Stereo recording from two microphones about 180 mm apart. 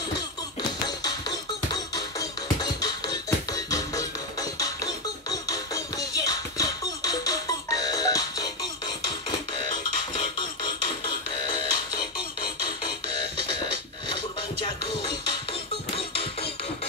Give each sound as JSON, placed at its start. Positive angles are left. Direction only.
{"t": 0.6, "sound": "music", "side_deg": 20}
{"t": 14.6, "sound": "music", "side_deg": 30}